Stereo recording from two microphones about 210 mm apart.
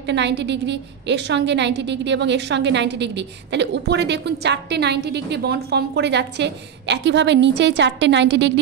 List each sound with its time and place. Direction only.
0.0 s a woman's voice: 55° right (ahead or behind)